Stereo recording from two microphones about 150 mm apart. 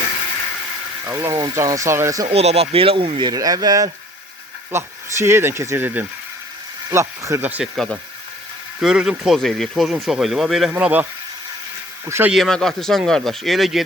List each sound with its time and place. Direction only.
1.0 s speech: 15° right (ahead or behind)
2.2 s speech: 45° right (ahead or behind); by 7.7 s 10° right (ahead or behind)
8.8 s speech: 5° right (ahead or behind)
12.0 s speech: 15° right (ahead or behind)
12.3 s speech: centre (ahead or behind)